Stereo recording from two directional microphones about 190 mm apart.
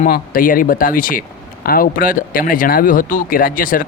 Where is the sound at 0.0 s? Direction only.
45° left (ahead or behind).